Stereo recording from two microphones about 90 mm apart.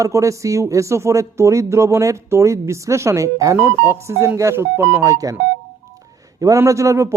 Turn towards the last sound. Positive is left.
turn(degrees=-35)  # may be behind; listen again after turning